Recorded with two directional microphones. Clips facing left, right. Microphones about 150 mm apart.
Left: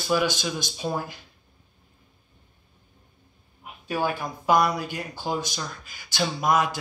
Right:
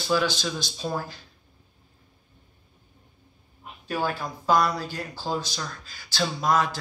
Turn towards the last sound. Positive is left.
turn(degrees=15)  # may be behind; listen again after turning